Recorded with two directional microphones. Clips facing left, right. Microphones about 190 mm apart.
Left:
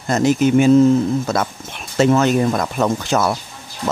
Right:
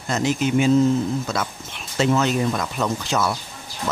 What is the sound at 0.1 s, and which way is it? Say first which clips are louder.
Speech: left 6 dB; 45° left (ahead or behind).